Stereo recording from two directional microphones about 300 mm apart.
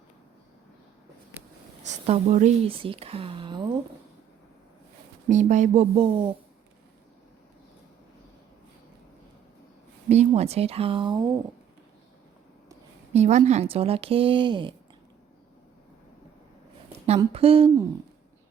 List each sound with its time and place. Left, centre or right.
1.8 s speech: right
5.3 s speech: right
10.1 s speech: right
13.1 s speech: right
17.1 s speech: centre